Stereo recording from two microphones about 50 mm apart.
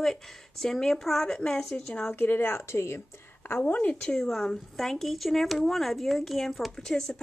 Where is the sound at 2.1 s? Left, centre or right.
Left.